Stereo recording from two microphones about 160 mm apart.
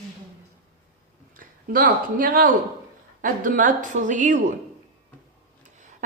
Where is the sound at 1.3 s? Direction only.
60° right (ahead or behind).